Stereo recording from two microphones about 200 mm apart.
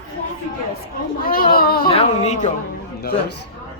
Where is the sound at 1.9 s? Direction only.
30° left (ahead or behind).